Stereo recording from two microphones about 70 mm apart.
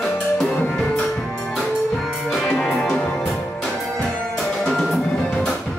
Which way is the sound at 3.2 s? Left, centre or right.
Centre.